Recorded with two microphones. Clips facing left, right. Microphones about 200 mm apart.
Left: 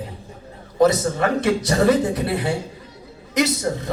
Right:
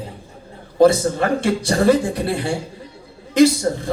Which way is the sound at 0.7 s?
30° right (ahead or behind).